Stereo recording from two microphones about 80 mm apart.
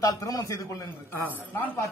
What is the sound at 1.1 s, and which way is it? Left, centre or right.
Speech, left.